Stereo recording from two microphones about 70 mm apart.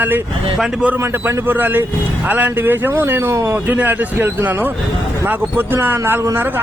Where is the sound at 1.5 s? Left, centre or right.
Right.